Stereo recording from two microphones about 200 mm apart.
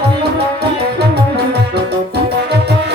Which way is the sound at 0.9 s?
55° right (ahead or behind).